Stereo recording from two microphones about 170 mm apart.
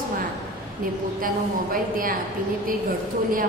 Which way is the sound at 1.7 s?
55° right (ahead or behind).